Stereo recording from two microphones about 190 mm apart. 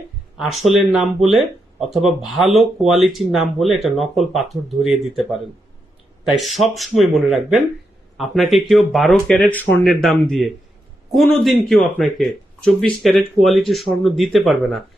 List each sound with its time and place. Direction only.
0.3 s speech: centre (ahead or behind)
6.2 s speech: centre (ahead or behind)
8.2 s speech: centre (ahead or behind)